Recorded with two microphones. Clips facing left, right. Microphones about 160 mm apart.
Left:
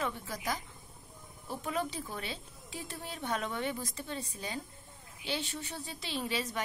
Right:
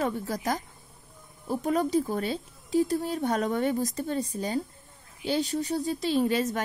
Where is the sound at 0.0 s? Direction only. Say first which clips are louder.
Right 8 dB; 40° right (ahead or behind).